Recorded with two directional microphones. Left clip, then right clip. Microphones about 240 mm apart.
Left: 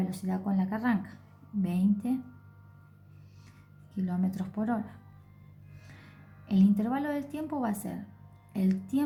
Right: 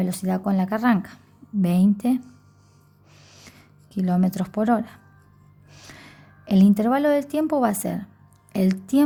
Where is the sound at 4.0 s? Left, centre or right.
Right.